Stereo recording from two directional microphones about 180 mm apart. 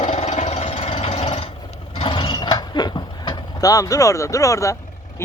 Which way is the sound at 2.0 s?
25° left (ahead or behind).